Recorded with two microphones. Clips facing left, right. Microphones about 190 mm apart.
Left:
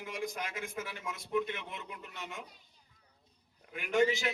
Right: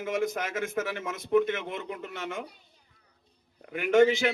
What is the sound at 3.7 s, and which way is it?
Speech, 70° right (ahead or behind).